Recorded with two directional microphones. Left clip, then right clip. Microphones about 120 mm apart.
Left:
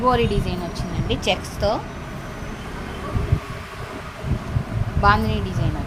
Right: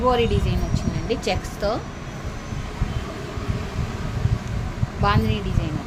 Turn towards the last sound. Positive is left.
turn(degrees=20)  # may be behind; listen again after turning